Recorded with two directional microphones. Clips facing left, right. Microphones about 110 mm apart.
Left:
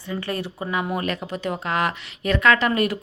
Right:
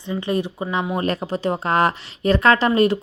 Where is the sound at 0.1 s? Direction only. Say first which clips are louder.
Right 5 dB; 20° right (ahead or behind).